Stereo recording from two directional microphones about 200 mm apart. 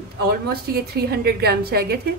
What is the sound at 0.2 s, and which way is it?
A woman's voice, 50° right (ahead or behind).